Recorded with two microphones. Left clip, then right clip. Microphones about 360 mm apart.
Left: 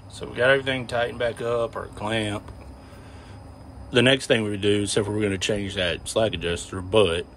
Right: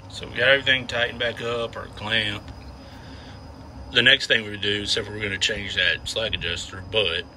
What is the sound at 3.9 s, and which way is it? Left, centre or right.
A man's voice, centre.